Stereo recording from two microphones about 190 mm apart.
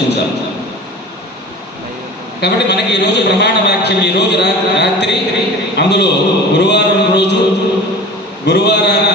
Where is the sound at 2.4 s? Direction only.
60° left (ahead or behind).